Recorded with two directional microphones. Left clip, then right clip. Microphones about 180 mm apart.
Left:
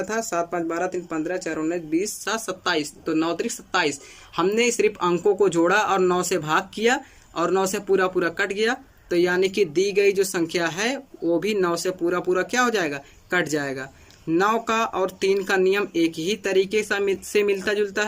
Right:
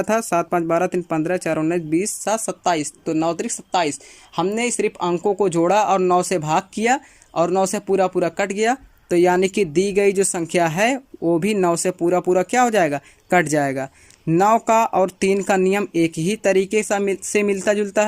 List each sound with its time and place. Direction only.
0.0 s speech: 50° right (ahead or behind)